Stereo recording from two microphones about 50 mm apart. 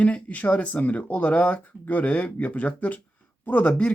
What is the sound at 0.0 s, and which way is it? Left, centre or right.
Speech, left.